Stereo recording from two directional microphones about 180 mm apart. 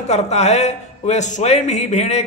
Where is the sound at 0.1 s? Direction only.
40° left (ahead or behind).